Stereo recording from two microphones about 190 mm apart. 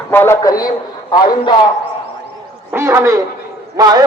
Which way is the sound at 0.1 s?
10° left (ahead or behind).